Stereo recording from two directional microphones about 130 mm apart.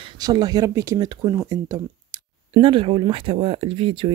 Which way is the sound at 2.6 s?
40° right (ahead or behind).